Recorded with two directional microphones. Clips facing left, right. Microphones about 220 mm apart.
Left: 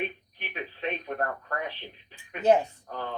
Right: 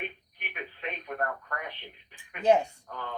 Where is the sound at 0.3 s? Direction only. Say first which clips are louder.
Left 4 dB; 30° left (ahead or behind).